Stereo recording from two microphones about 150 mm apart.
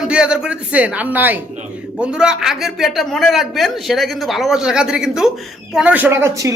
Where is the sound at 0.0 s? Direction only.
5° right (ahead or behind).